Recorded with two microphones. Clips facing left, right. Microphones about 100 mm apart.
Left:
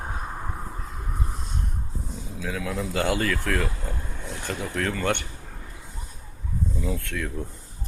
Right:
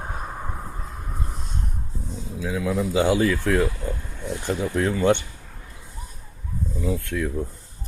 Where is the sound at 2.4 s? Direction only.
10° right (ahead or behind).